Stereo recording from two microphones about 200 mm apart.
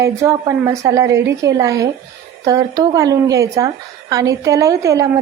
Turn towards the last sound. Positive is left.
turn(degrees=-15)  # may be behind; listen again after turning